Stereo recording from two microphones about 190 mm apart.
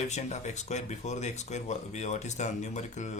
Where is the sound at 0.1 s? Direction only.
35° left (ahead or behind).